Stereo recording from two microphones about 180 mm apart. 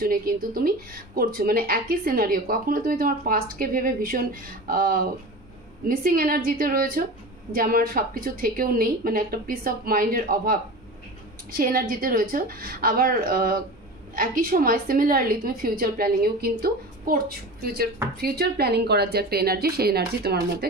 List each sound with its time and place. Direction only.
0.0 s a woman's voice: 55° right (ahead or behind)
18.2 s a woman's voice: 60° right (ahead or behind)